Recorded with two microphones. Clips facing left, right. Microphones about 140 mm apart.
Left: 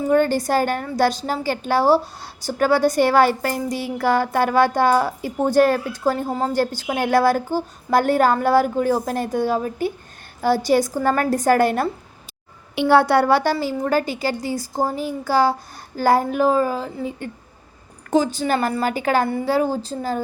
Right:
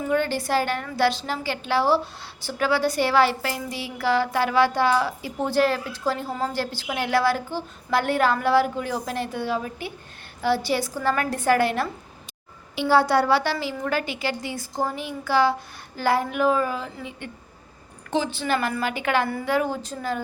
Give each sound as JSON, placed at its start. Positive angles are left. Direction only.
{"t": 0.0, "sound": "a woman's voice", "side_deg": 45}
{"t": 12.7, "sound": "a woman's voice", "side_deg": 60}